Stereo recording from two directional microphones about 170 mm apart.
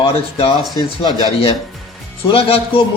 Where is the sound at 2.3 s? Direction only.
35° left (ahead or behind).